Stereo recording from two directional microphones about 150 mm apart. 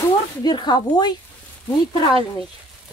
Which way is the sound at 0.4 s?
30° left (ahead or behind).